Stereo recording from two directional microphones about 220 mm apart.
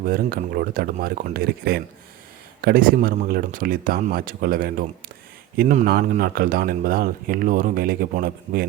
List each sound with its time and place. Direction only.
0.0 s speech: 40° right (ahead or behind)